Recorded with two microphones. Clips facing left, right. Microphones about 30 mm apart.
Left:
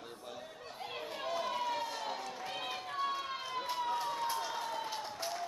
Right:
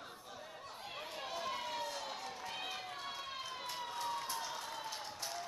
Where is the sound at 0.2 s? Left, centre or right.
Centre.